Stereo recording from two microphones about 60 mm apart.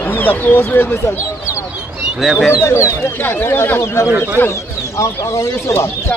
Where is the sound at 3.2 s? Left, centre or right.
Left.